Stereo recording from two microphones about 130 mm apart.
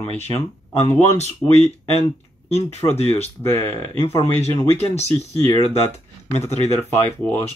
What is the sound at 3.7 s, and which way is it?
Speech, 20° left (ahead or behind).